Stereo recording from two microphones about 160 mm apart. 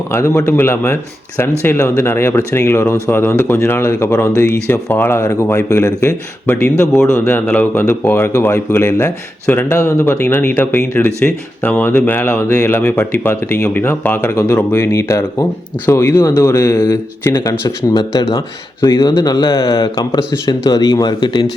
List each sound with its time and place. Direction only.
0.1 s speech: 15° left (ahead or behind)